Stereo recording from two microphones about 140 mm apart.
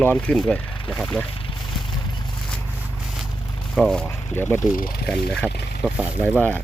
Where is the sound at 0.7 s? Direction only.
40° left (ahead or behind).